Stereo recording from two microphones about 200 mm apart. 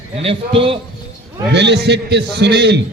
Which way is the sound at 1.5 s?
60° right (ahead or behind).